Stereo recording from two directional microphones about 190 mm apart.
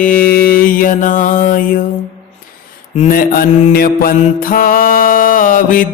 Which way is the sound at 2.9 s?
40° left (ahead or behind).